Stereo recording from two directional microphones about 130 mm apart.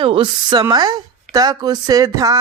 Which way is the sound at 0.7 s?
30° right (ahead or behind).